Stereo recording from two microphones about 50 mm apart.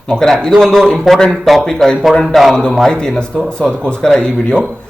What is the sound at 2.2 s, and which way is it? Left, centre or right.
Speech, centre.